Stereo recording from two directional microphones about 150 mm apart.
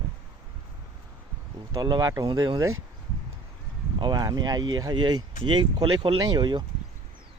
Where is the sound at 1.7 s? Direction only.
25° right (ahead or behind).